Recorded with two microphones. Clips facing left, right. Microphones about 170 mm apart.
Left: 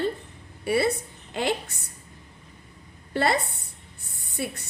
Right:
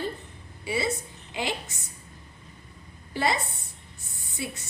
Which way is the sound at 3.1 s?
60° left (ahead or behind).